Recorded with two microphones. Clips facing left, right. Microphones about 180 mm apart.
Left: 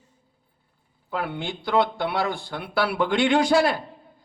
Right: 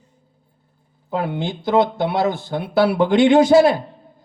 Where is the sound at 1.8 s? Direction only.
45° right (ahead or behind).